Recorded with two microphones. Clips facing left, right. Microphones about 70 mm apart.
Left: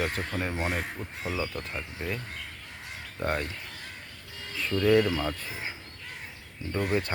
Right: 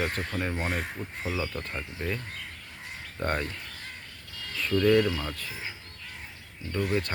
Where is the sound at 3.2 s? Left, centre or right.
Centre.